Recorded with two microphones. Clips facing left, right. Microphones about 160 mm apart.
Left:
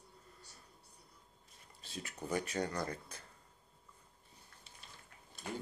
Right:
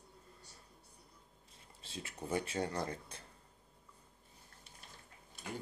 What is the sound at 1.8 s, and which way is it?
Speech, 25° right (ahead or behind).